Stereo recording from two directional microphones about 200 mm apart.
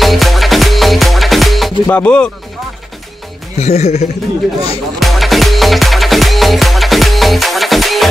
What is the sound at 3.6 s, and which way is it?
Speech, 35° left (ahead or behind).